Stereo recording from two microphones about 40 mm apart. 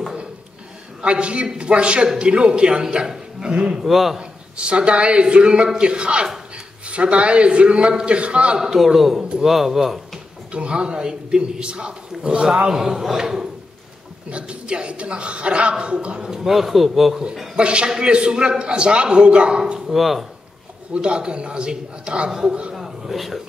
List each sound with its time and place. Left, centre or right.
1.0 s a woman's voice: right
3.8 s speech: centre
4.2 s a woman's voice: right
8.5 s a man's voice: centre
10.5 s a woman's voice: right
14.3 s a woman's voice: right
16.3 s speech: centre
17.6 s a woman's voice: right
19.9 s a man's voice: centre
20.9 s a woman's voice: right
22.3 s speech: centre